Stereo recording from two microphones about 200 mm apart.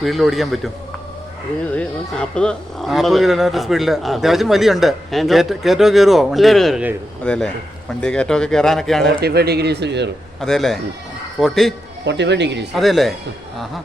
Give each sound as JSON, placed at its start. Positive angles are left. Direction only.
{"t": 0.0, "sound": "speech", "side_deg": 0}
{"t": 9.2, "sound": "speech", "side_deg": -55}
{"t": 10.4, "sound": "speech", "side_deg": 0}
{"t": 12.0, "sound": "speech", "side_deg": -60}
{"t": 12.7, "sound": "speech", "side_deg": 0}